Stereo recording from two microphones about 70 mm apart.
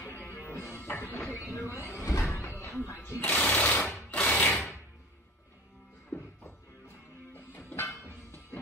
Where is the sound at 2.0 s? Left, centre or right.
Left.